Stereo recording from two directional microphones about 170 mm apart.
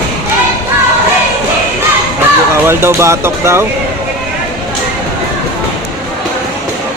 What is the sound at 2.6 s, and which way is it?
Speech, 15° right (ahead or behind).